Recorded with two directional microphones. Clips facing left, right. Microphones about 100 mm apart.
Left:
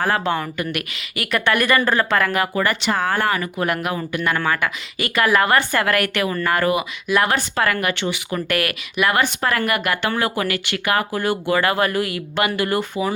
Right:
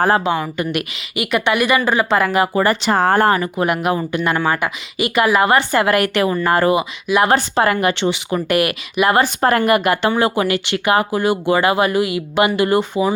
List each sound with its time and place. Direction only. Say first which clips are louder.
0.3 s speech: right 3 dB; 15° right (ahead or behind); by 3.7 s 30° right (ahead or behind)
3.7 s speech: right 5 dB; 20° right (ahead or behind)